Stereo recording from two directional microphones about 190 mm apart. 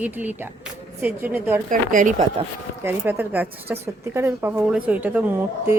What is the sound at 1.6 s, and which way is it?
Speech, 45° right (ahead or behind).